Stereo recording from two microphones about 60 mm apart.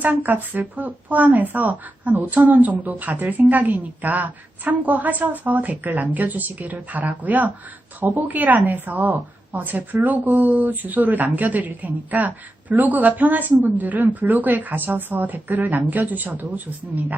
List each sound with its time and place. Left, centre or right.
0.0 s speech: right